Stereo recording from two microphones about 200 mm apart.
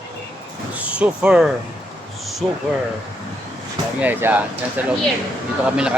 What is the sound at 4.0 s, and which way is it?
Speech, 10° right (ahead or behind).